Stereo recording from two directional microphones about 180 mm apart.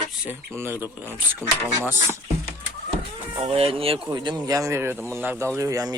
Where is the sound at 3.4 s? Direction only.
35° right (ahead or behind).